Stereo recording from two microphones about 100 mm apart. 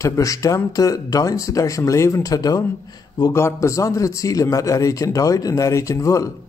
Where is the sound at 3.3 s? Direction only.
25° left (ahead or behind).